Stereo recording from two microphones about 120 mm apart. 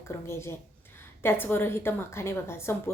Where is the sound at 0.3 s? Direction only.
25° left (ahead or behind).